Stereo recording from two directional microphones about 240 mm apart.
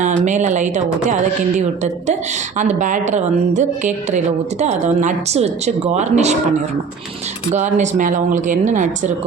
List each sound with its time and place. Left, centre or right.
0.0 s a woman's voice: right
7.5 s a woman's voice: right